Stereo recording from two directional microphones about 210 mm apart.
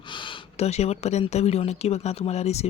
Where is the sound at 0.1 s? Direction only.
25° left (ahead or behind).